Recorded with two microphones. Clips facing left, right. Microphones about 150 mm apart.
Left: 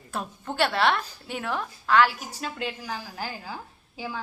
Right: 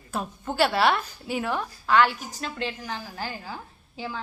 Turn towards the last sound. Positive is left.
turn(degrees=5)  # may be behind; listen again after turning